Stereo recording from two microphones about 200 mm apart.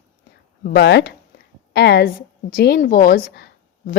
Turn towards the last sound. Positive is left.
turn(degrees=50)  # may be behind; listen again after turning